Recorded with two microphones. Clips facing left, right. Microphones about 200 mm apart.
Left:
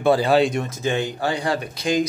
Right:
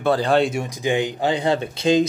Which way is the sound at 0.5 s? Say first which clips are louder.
Right 1 dB; 10° right (ahead or behind).